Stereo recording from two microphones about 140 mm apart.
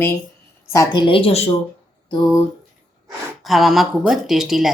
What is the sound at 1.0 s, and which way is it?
Speech, 40° left (ahead or behind).